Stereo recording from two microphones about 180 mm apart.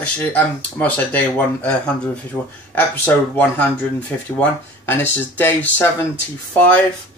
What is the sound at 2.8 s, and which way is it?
Speech, 10° left (ahead or behind).